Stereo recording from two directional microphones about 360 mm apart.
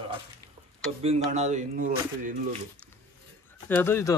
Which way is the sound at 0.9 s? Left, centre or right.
Centre.